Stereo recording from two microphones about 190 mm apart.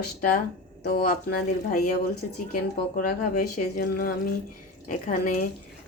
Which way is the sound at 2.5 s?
45° left (ahead or behind).